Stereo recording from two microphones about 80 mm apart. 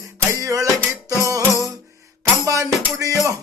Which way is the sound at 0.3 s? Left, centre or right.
Right.